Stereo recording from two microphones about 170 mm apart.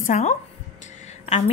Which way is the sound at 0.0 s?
45° left (ahead or behind).